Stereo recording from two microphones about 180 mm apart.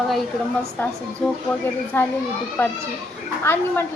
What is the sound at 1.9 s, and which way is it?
Speech, 10° left (ahead or behind).